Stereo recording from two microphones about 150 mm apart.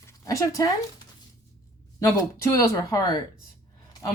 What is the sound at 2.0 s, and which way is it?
A woman's voice, 20° left (ahead or behind).